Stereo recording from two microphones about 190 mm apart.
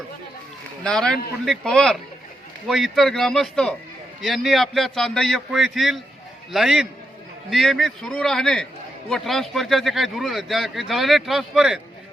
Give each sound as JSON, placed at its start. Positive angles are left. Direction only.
{"t": 0.9, "sound": "speech", "side_deg": 5}